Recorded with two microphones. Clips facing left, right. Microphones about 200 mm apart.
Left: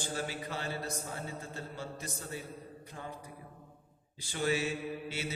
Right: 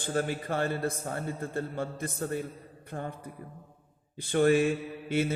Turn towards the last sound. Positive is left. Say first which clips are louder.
# right 8 dB
turn(degrees=-55)  # may be behind; listen again after turning